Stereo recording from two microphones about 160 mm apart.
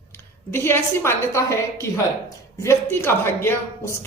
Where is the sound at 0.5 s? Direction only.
15° left (ahead or behind).